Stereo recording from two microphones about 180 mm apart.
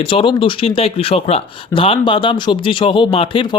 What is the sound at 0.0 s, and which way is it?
Speech, 30° left (ahead or behind).